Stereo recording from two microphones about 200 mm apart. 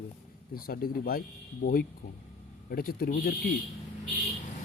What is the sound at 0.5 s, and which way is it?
Speech, 45° left (ahead or behind).